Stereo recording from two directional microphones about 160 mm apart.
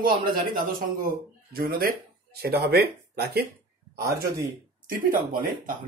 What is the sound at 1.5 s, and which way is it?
Speech, 70° right (ahead or behind).